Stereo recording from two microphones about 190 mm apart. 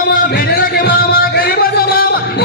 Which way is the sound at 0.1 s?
55° left (ahead or behind).